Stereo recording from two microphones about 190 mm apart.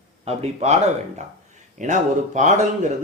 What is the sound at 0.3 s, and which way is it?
A man's voice, 35° right (ahead or behind).